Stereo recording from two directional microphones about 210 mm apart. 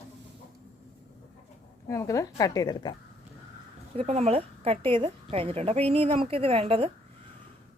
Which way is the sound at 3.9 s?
30° right (ahead or behind).